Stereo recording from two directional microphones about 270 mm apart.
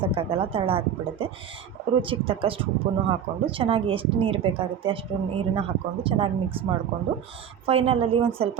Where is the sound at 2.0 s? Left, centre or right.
Centre.